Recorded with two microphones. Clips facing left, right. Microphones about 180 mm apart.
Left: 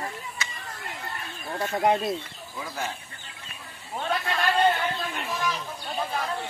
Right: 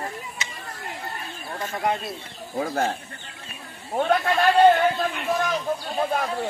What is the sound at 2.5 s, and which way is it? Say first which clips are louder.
Speech: right 9 dB; 50° right (ahead or behind).